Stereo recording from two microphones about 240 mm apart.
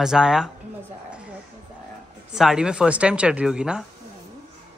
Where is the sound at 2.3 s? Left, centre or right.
Centre.